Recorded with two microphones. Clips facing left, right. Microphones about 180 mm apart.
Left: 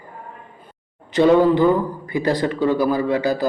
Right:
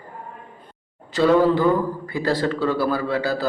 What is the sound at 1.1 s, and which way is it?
Speech, 20° left (ahead or behind).